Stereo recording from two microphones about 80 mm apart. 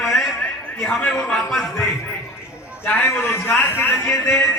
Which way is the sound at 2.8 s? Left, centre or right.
Left.